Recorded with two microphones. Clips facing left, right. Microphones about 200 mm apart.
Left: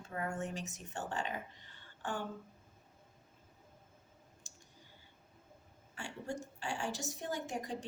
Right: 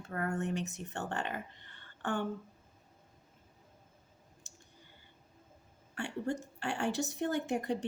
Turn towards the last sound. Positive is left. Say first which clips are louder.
# right 7 dB
turn(degrees=-60)  # may be behind; listen again after turning